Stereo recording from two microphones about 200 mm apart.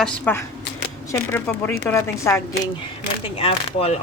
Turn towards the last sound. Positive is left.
turn(degrees=30)  # may be behind; listen again after turning